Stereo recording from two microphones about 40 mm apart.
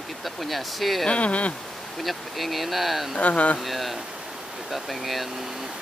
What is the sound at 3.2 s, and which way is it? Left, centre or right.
Speech, left.